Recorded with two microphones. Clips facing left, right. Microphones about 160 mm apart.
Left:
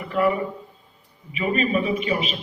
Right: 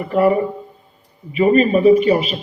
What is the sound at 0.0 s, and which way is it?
A man's voice, 45° right (ahead or behind).